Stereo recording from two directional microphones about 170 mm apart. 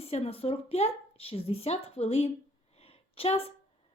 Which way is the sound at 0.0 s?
35° left (ahead or behind).